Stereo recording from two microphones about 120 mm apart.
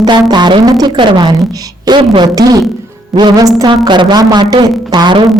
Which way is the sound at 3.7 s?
40° right (ahead or behind).